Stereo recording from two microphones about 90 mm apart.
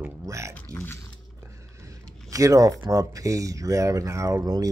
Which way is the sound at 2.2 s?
35° right (ahead or behind).